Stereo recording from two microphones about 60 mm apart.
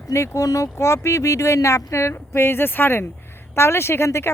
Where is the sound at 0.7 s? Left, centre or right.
Left.